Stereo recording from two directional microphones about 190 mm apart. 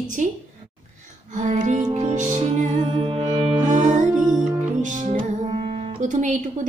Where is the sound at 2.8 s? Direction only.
25° right (ahead or behind).